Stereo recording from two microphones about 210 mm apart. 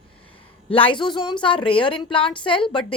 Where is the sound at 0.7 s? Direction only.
25° left (ahead or behind).